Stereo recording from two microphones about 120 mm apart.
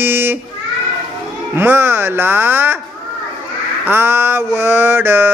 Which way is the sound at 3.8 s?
20° right (ahead or behind).